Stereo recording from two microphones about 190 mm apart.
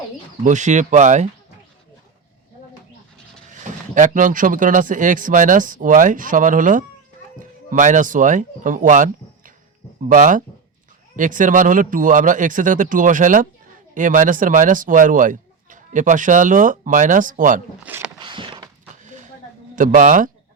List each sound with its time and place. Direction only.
0.4 s speech: 40° right (ahead or behind)
3.5 s speech: 40° right (ahead or behind)
10.1 s speech: 45° right (ahead or behind)
17.8 s speech: 10° right (ahead or behind)
18.2 s a sound: 25° right (ahead or behind)
19.7 s speech: 45° right (ahead or behind)